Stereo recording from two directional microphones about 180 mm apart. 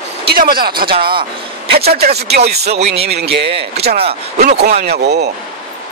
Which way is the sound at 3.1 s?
65° right (ahead or behind).